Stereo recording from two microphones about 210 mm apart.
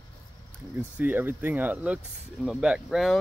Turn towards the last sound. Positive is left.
turn(degrees=0)  # may be behind; listen again after turning